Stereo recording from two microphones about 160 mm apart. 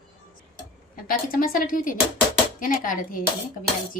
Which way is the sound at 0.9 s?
65° left (ahead or behind).